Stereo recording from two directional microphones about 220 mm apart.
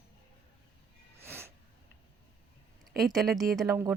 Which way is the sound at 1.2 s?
10° right (ahead or behind).